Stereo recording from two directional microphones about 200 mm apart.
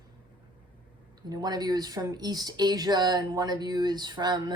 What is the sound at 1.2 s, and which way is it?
Speech, 20° right (ahead or behind).